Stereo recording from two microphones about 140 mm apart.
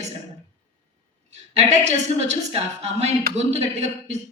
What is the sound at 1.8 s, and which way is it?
A man's voice, 55° right (ahead or behind).